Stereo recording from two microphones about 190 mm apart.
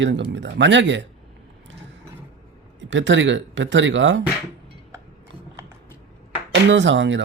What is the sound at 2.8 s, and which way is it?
Speech, 75° right (ahead or behind).